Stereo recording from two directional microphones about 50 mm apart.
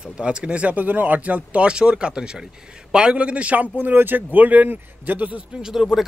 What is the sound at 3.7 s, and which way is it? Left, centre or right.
A man's voice, right.